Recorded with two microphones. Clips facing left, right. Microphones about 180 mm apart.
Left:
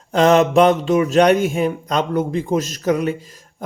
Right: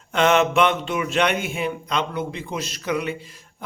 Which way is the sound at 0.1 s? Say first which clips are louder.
Left 5 dB; 35° left (ahead or behind).